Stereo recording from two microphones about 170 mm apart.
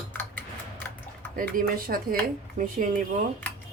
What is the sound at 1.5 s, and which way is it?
Speech, 60° right (ahead or behind).